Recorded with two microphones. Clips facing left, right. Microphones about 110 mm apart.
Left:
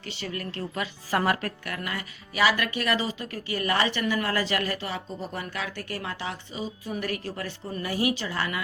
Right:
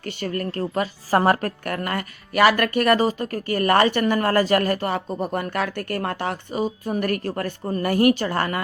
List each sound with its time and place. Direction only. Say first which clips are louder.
0.0 s a woman's voice: right 8 dB; 50° right (ahead or behind)